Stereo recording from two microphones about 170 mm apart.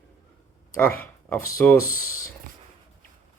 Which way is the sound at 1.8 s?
55° left (ahead or behind).